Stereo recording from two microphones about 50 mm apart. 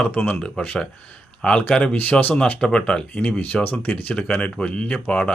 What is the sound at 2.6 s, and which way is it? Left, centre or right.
Speech, centre.